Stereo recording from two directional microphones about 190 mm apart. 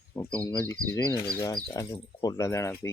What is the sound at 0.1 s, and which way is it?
Speech, 20° left (ahead or behind).